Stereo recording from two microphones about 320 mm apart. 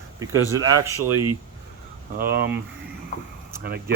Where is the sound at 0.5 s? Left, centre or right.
Centre.